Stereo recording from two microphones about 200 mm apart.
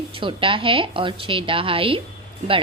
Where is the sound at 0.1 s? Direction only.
25° right (ahead or behind).